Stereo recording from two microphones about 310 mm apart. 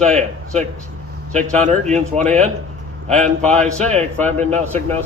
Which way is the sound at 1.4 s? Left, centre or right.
Right.